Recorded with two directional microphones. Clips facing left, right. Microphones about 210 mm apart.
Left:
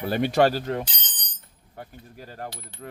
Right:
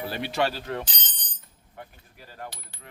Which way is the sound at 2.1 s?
45° left (ahead or behind).